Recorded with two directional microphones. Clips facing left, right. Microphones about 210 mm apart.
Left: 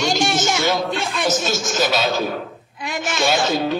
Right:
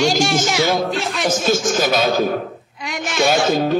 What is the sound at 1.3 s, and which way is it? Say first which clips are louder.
A woman's voice: right 4 dB; 50° right (ahead or behind).